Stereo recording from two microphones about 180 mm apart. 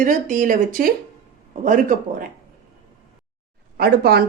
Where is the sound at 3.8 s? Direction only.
60° right (ahead or behind).